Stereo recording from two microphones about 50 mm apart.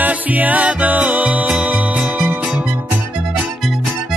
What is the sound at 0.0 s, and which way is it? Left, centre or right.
Music, right.